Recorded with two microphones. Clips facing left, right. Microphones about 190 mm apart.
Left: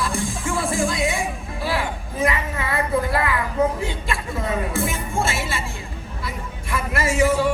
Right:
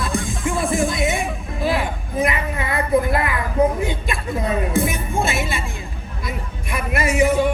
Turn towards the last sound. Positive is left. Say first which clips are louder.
# right 2 dB
turn(degrees=-15)  # may be behind; listen again after turning